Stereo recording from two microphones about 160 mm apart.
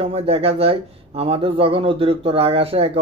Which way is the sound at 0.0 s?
35° right (ahead or behind).